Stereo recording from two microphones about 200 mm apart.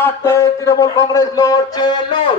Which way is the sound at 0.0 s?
15° left (ahead or behind).